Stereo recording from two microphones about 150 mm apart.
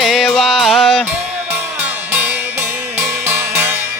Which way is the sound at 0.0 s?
Centre (ahead or behind).